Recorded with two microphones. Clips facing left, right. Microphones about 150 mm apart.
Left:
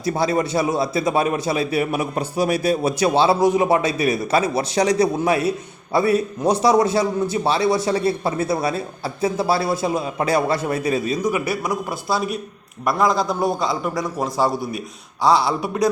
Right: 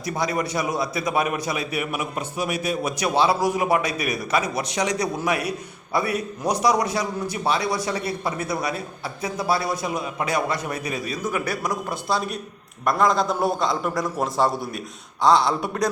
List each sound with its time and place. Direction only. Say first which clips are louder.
0.0 s a man's voice: left 5 dB; 30° left (ahead or behind)
11.2 s a man's voice: left 4 dB; 10° left (ahead or behind)